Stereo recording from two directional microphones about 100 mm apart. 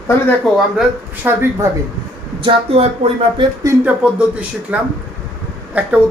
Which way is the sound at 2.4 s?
65° right (ahead or behind).